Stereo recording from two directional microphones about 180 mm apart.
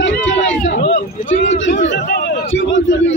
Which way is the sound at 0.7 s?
90° left.